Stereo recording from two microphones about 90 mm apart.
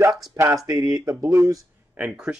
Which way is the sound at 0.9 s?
40° right (ahead or behind).